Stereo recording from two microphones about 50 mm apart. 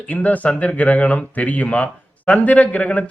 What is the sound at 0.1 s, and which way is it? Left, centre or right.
Speech, left.